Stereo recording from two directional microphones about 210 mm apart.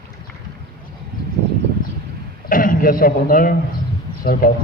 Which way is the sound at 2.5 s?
40° left (ahead or behind).